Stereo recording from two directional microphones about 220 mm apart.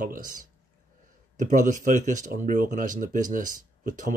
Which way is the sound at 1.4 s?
35° right (ahead or behind).